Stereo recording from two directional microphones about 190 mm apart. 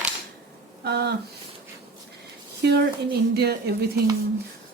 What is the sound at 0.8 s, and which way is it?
Speech, 60° right (ahead or behind).